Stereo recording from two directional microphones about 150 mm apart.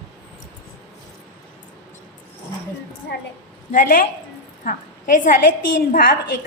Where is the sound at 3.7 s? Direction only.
65° left (ahead or behind).